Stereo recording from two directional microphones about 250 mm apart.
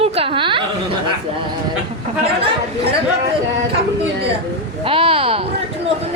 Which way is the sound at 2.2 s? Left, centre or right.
Right.